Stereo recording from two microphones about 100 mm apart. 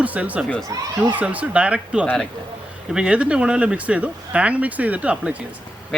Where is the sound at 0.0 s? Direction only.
15° right (ahead or behind).